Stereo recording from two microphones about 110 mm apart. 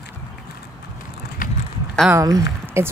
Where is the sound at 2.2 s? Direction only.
30° right (ahead or behind).